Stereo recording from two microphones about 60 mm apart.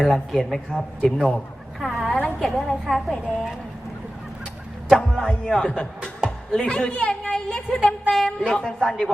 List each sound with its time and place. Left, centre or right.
0.0 s speech: centre
1.8 s a sound: centre
2.2 s speech: centre
4.9 s a sound: centre
5.5 s a woman's voice: centre
8.1 s a woman's voice: centre